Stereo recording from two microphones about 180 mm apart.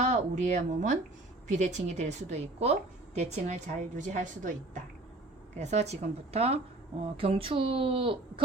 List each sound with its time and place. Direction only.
0.0 s a woman's voice: 40° right (ahead or behind)